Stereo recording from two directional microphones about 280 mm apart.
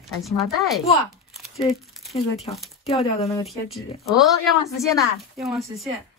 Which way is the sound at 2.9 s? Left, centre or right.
Left.